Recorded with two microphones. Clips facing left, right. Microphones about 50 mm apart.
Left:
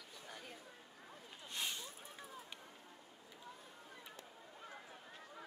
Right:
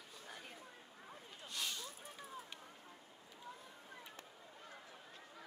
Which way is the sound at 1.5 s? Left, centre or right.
Left.